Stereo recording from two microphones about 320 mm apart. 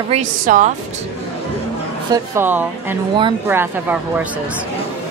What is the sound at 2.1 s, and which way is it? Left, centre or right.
Speech, centre.